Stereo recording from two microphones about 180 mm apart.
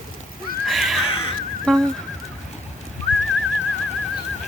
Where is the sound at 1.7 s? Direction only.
5° left (ahead or behind).